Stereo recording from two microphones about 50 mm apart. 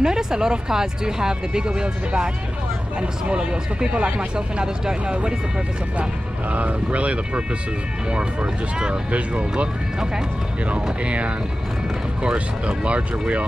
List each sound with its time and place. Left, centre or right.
0.0 s speech: centre
6.5 s speech: right